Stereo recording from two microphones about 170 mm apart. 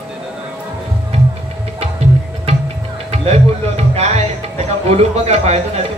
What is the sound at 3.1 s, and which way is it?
Music, 40° right (ahead or behind).